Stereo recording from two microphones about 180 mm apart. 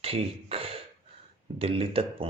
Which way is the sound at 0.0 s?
35° right (ahead or behind).